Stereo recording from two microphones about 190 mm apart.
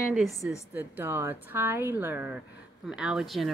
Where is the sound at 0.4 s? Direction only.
10° right (ahead or behind).